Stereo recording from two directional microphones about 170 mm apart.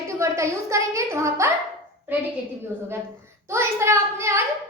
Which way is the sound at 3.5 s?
15° right (ahead or behind).